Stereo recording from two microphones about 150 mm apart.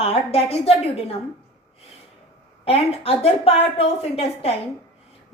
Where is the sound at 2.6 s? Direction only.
40° left (ahead or behind).